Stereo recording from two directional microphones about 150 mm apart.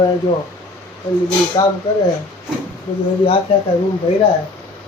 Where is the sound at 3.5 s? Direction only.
35° left (ahead or behind).